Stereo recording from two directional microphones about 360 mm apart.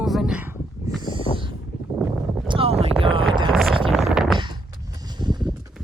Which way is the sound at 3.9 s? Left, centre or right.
Centre.